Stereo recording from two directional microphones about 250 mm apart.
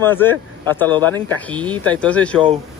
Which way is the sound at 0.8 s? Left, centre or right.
Centre.